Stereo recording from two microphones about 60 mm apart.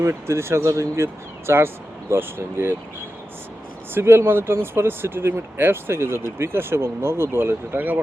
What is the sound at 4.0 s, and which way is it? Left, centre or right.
Speech, right.